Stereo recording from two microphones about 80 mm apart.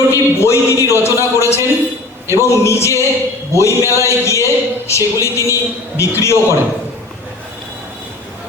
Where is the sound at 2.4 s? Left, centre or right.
Left.